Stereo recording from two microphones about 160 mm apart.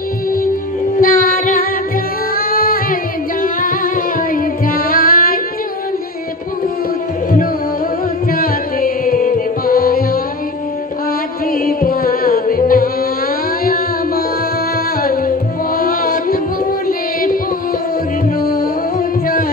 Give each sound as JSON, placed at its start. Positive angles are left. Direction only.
{"t": 1.0, "sound": "female singing", "side_deg": 60}
{"t": 2.3, "sound": "singing", "side_deg": 65}
{"t": 3.4, "sound": "music", "side_deg": 60}
{"t": 8.3, "sound": "music", "side_deg": 65}
{"t": 11.5, "sound": "music", "side_deg": 65}
{"t": 15.0, "sound": "music", "side_deg": 65}
{"t": 16.8, "sound": "carnatic music", "side_deg": 60}
{"t": 18.4, "sound": "music", "side_deg": 65}